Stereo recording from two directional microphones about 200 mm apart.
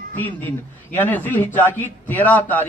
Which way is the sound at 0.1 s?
10° left (ahead or behind).